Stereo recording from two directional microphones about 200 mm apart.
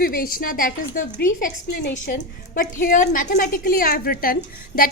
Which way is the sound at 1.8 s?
60° left (ahead or behind).